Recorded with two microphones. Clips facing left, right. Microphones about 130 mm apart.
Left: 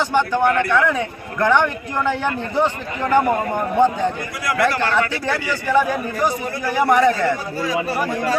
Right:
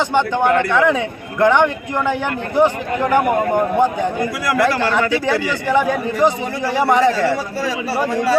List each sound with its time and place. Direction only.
0.0 s a man's voice: 20° right (ahead or behind)